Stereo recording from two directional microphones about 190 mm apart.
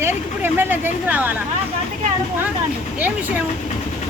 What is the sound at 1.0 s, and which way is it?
Speech, 10° right (ahead or behind).